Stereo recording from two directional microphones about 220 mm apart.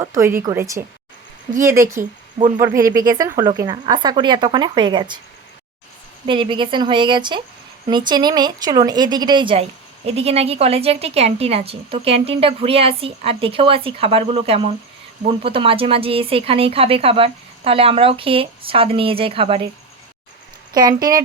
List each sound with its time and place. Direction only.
0.0 s a woman's voice: 10° right (ahead or behind)
6.2 s a woman's voice: 25° right (ahead or behind)
20.7 s speech: 15° right (ahead or behind)